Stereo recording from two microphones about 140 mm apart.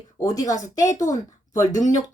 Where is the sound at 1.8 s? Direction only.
65° left (ahead or behind).